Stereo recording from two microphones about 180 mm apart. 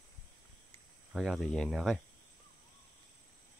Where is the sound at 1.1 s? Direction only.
Centre (ahead or behind).